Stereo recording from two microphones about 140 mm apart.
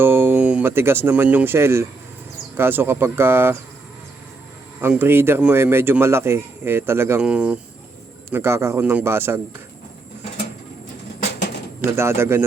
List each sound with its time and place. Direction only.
0.0 s speech: 15° right (ahead or behind)
4.8 s speech: 15° right (ahead or behind)
8.3 s speech: 20° right (ahead or behind)
11.9 s speech: 20° right (ahead or behind)